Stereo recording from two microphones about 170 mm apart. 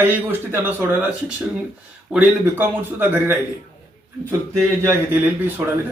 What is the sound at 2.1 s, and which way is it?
Speech, 10° right (ahead or behind).